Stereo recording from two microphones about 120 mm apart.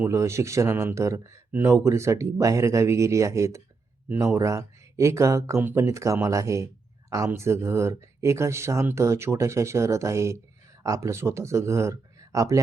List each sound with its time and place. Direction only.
0.0 s speech: 25° right (ahead or behind)